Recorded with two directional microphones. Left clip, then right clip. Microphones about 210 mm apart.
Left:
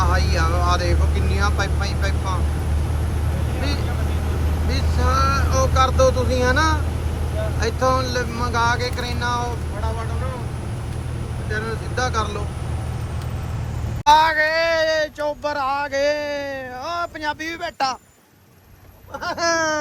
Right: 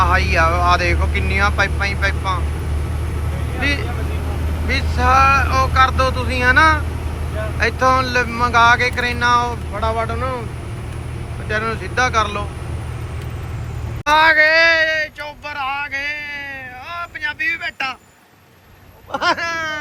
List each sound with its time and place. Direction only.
0.0 s speech: 5° left (ahead or behind)
4.7 s speech: 5° left (ahead or behind)
11.5 s speech: centre (ahead or behind)
14.0 s speech: 5° left (ahead or behind)
14.8 s speech: 30° left (ahead or behind)
19.1 s speech: centre (ahead or behind)
19.4 s a sound: 25° left (ahead or behind)